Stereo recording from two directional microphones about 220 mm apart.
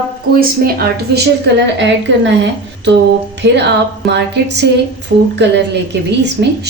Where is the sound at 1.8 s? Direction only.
55° right (ahead or behind).